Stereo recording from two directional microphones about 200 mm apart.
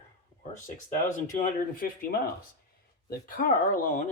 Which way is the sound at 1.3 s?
45° left (ahead or behind).